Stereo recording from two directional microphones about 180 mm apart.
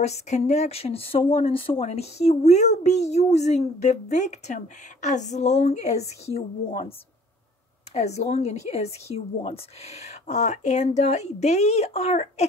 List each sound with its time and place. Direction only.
0.0 s speech: 40° left (ahead or behind)
8.2 s speech: 35° left (ahead or behind)